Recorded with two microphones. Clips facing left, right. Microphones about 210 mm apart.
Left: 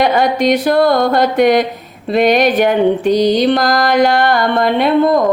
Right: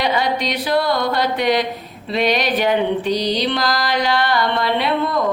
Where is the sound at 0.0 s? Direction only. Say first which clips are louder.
Left 7 dB; 50° left (ahead or behind).